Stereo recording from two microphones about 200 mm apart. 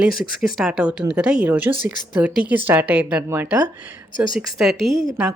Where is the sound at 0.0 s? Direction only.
Centre (ahead or behind).